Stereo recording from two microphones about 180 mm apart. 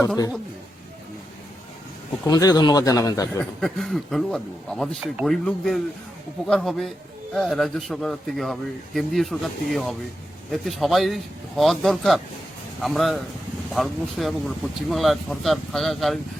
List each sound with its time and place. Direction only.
2.2 s speech: 20° left (ahead or behind)
3.6 s a man's voice: centre (ahead or behind)